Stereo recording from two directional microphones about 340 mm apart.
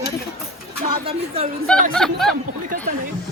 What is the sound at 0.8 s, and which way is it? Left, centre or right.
Speech, centre.